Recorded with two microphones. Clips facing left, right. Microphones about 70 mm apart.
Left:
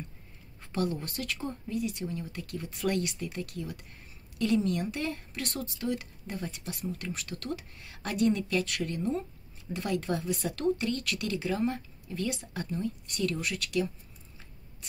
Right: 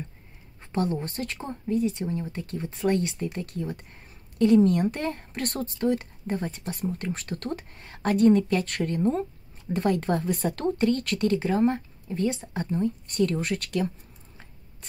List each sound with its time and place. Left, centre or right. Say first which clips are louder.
0.6 s a woman's voice: right 4 dB; right